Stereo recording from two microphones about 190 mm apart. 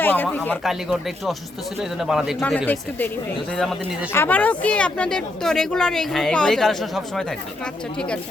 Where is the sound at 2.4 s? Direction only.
5° left (ahead or behind).